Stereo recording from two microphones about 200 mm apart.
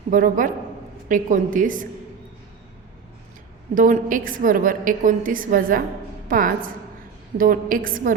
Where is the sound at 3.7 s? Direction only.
40° right (ahead or behind).